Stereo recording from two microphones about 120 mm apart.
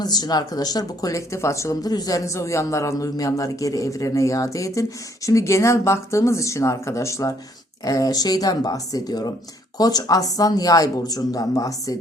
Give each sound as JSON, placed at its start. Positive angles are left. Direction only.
{"t": 0.0, "sound": "speech", "side_deg": 35}